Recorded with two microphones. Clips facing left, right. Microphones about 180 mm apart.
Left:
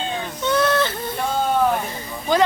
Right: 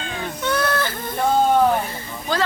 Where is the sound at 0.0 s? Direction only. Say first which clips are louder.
Left 2 dB; 25° left (ahead or behind).